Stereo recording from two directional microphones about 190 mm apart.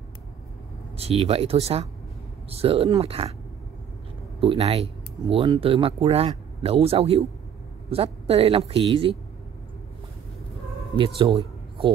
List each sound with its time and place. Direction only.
0.9 s speech: 30° right (ahead or behind)
4.4 s speech: 30° right (ahead or behind)
11.1 s a man's voice: 30° right (ahead or behind)